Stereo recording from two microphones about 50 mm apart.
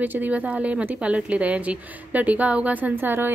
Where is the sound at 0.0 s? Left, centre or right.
Right.